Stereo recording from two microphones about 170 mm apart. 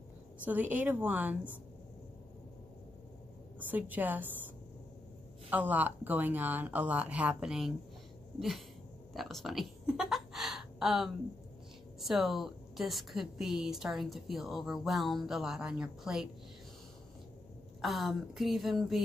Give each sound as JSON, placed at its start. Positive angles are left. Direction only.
{"t": 0.5, "sound": "speech", "side_deg": -10}
{"t": 3.5, "sound": "speech", "side_deg": -10}
{"t": 5.5, "sound": "a woman's voice", "side_deg": -10}
{"t": 9.1, "sound": "a sound", "side_deg": 0}
{"t": 12.0, "sound": "a woman's voice", "side_deg": 0}
{"t": 17.8, "sound": "a woman's voice", "side_deg": 0}